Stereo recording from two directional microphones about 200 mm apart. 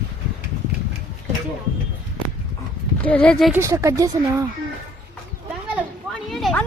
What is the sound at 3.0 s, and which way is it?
Speech, 5° left (ahead or behind).